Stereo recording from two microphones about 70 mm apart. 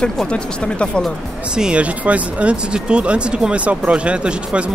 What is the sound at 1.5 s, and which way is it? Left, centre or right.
Speech, centre.